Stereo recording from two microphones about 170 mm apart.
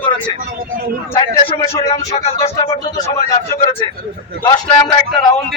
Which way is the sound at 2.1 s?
40° left (ahead or behind).